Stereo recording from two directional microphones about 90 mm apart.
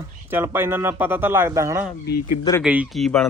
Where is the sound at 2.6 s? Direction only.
10° right (ahead or behind).